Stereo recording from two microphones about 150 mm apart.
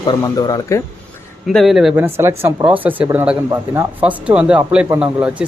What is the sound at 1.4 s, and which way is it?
Speech, centre (ahead or behind).